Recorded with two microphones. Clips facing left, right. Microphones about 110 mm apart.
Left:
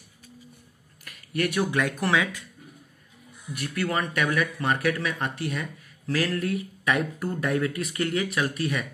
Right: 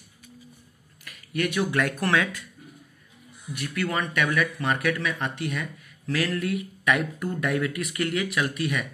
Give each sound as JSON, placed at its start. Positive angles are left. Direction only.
{"t": 1.0, "sound": "a sound", "side_deg": 40}
{"t": 1.7, "sound": "speech", "side_deg": 15}
{"t": 3.5, "sound": "speech", "side_deg": 40}